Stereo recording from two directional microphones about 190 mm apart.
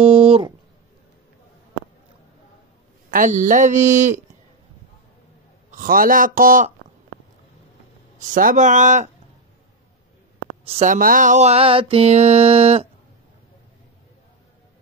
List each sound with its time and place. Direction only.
0.0 s a sound: 30° right (ahead or behind)
3.1 s mantra: 40° right (ahead or behind)
5.7 s a man's voice: 45° right (ahead or behind)
8.3 s mantra: 45° right (ahead or behind)
10.6 s speech: 35° right (ahead or behind)
11.0 s mantra: 45° right (ahead or behind)